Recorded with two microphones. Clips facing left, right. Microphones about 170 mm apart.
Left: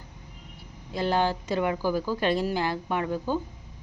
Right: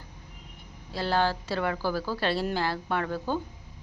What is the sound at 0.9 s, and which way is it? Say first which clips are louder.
Speech: left 1 dB; 15° left (ahead or behind).